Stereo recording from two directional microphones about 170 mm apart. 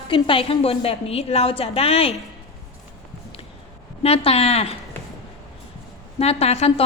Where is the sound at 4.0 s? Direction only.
35° left (ahead or behind).